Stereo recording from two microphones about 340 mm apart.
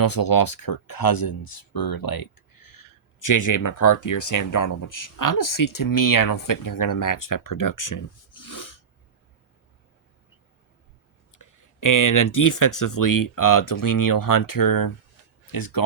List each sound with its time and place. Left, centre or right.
0.0 s speech: left
11.3 s speech: left